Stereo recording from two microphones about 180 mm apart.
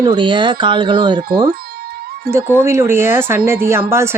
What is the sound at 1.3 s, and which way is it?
Speech, 55° right (ahead or behind).